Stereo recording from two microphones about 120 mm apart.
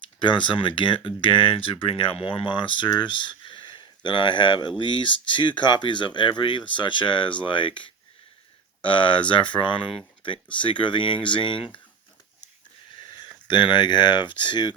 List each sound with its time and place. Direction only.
0.2 s speech: 40° left (ahead or behind)
13.0 s a sound: 40° left (ahead or behind)
13.5 s speech: 40° left (ahead or behind)